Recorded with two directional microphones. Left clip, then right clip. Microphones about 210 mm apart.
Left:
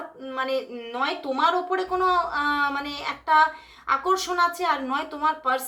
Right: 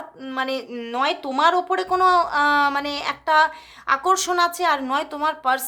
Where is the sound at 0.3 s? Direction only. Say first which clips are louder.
Right 1 dB; 45° right (ahead or behind).